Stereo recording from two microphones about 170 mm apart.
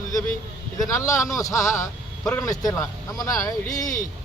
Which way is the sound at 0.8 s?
20° left (ahead or behind).